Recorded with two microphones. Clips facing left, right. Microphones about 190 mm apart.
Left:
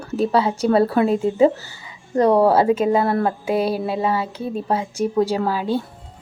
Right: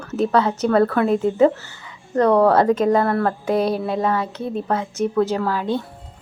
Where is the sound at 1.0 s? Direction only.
30° left (ahead or behind).